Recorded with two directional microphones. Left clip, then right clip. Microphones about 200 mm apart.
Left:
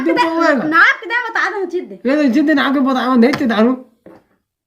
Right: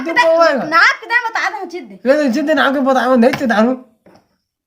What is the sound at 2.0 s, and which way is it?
Speech, 30° right (ahead or behind).